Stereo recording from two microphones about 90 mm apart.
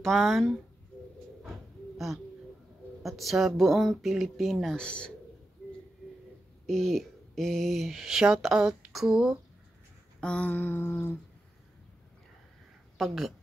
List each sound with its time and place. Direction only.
0.0 s speech: centre (ahead or behind)
1.4 s a sound: centre (ahead or behind)
3.0 s speech: centre (ahead or behind)
6.6 s speech: 5° left (ahead or behind)
10.2 s humming: 15° left (ahead or behind)
12.9 s speech: 5° right (ahead or behind)